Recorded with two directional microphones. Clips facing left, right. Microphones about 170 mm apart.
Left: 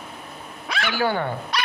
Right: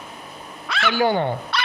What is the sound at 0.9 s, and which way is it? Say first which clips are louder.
Speech: right 4 dB; 15° right (ahead or behind).